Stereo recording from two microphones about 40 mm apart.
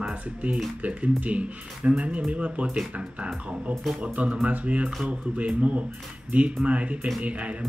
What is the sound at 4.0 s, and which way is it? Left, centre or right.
Speech, right.